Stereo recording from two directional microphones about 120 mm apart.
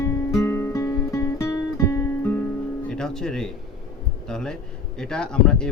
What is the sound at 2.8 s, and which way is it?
Music, 5° left (ahead or behind).